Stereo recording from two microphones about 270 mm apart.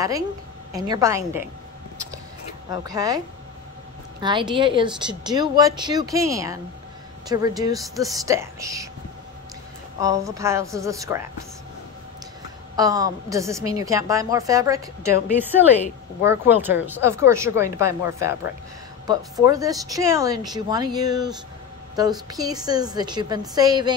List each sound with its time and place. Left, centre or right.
0.7 s a woman's voice: centre
2.7 s a woman's voice: centre
4.2 s a woman's voice: centre
9.9 s a woman's voice: centre
12.7 s a woman's voice: centre
16.3 s a woman's voice: centre